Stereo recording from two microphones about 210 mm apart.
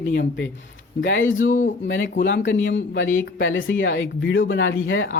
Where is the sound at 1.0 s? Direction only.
65° left (ahead or behind).